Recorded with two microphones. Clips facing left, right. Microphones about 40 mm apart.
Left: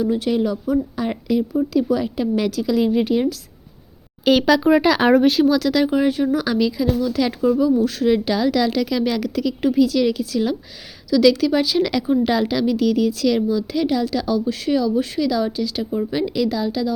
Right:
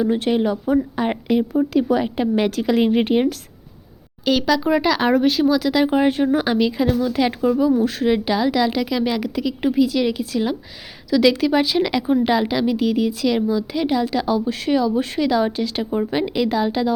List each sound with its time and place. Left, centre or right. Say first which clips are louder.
0.0 s speech: right 1 dB; right
4.3 s speech: left 3 dB; centre
5.5 s a woman's voice: even; centre
6.1 s speech: right 1 dB; right
8.1 s a woman's voice: even; centre; by 16.9 s right